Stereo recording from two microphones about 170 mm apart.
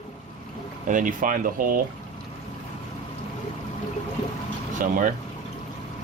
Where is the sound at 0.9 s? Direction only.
50° right (ahead or behind).